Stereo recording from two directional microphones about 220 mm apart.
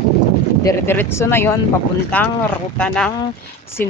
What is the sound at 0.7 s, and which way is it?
Speech, 10° left (ahead or behind).